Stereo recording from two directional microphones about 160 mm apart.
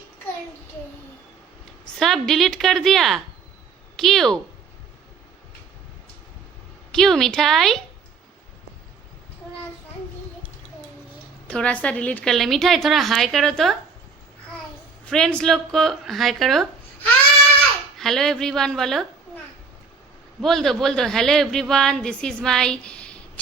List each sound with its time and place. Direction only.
2.0 s speech: centre (ahead or behind)
6.9 s speech: centre (ahead or behind)
11.4 s speech: 5° left (ahead or behind)
15.0 s speech: 5° left (ahead or behind)
17.9 s speech: centre (ahead or behind)
20.4 s speech: centre (ahead or behind)